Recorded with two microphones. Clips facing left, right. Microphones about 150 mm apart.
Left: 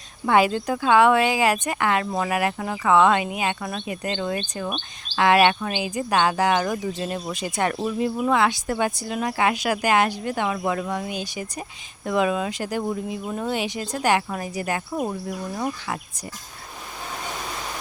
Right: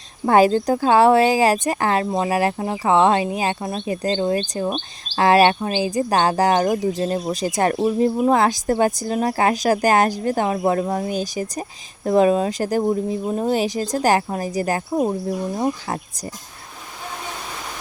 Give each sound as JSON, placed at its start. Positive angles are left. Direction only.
{"t": 0.3, "sound": "speech", "side_deg": -40}